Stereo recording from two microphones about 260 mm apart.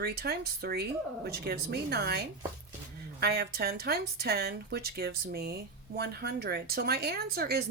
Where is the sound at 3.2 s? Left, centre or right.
Right.